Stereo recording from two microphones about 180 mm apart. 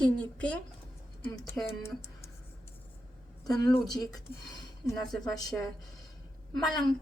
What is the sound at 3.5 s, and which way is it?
Speech, 20° left (ahead or behind).